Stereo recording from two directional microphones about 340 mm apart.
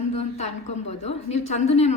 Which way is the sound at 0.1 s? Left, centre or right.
Centre.